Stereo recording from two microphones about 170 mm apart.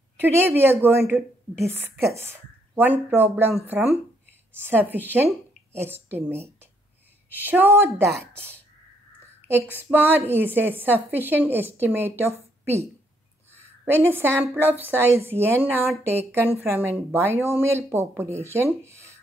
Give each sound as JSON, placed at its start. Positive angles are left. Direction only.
{"t": 0.2, "sound": "a woman's voice", "side_deg": -15}
{"t": 9.8, "sound": "a woman's voice", "side_deg": -10}
{"t": 13.6, "sound": "a sound", "side_deg": -15}
{"t": 14.5, "sound": "a woman's voice", "side_deg": -10}